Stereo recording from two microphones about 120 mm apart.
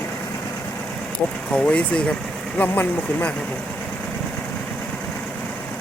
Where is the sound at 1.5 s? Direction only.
10° left (ahead or behind).